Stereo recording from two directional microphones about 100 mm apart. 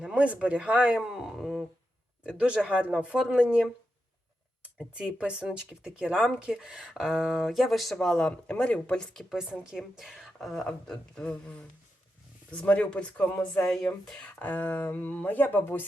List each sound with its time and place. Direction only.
0.0 s speech: 10° right (ahead or behind)
4.9 s speech: 10° right (ahead or behind); by 9.2 s 10° left (ahead or behind)
9.3 s speech: 5° right (ahead or behind); by 15.8 s 20° left (ahead or behind)